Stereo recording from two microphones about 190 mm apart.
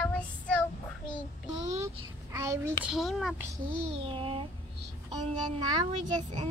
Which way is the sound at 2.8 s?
Centre (ahead or behind).